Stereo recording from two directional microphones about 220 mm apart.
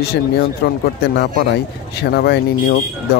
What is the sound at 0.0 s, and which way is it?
Speech, 45° left (ahead or behind).